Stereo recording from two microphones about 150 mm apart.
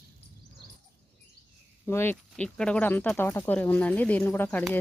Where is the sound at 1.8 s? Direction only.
15° left (ahead or behind).